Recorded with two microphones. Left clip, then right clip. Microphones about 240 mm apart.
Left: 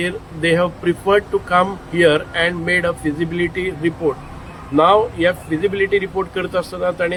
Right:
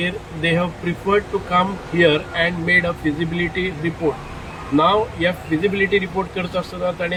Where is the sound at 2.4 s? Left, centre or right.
Centre.